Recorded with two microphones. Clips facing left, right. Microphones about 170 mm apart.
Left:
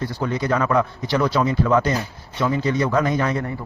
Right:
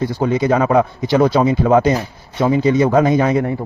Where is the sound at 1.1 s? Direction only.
50° right (ahead or behind).